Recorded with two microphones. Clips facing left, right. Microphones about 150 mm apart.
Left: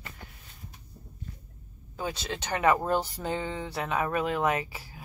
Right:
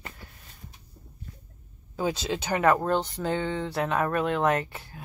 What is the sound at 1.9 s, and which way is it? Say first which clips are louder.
Speech: right 6 dB; 10° right (ahead or behind).